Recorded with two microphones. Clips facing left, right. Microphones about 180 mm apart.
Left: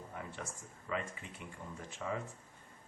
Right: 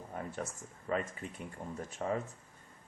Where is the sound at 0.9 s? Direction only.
45° right (ahead or behind).